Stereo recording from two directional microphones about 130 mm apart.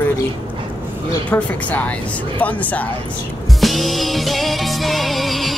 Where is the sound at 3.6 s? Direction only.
Centre (ahead or behind).